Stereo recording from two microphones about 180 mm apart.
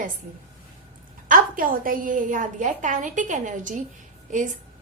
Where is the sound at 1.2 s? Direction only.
50° right (ahead or behind).